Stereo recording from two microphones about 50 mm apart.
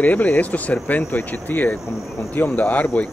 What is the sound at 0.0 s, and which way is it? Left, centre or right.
Speech, left.